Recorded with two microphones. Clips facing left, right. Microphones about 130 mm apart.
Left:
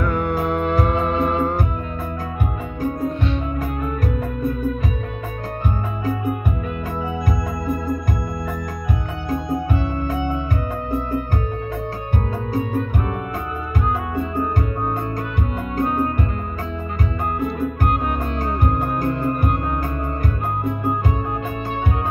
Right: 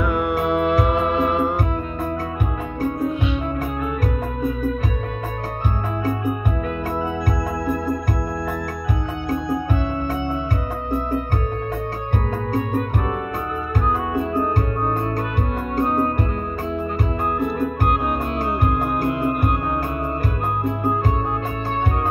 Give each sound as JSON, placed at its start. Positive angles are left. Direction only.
{"t": 0.0, "sound": "music", "side_deg": -5}
{"t": 15.7, "sound": "music", "side_deg": -35}
{"t": 18.7, "sound": "music", "side_deg": -5}